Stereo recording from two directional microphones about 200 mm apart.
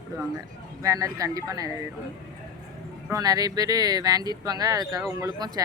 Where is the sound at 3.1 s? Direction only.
20° right (ahead or behind).